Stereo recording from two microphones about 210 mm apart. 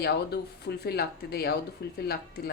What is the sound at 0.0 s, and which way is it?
Speech, 50° left (ahead or behind).